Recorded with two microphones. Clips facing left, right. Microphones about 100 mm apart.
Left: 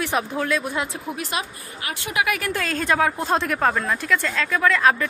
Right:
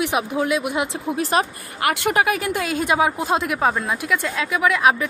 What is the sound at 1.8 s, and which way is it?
Speech, 70° right (ahead or behind).